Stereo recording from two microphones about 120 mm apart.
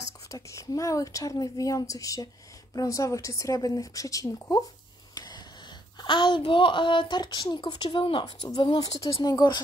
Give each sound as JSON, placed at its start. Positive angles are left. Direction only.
{"t": 0.3, "sound": "a woman's voice", "side_deg": 25}
{"t": 5.1, "sound": "a sound", "side_deg": 35}
{"t": 5.9, "sound": "speech", "side_deg": 40}